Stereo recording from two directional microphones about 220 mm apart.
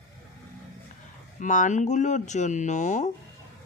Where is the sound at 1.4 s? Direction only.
35° left (ahead or behind).